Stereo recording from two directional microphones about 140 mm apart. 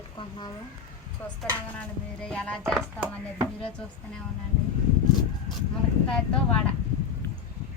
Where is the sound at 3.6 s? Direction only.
5° left (ahead or behind).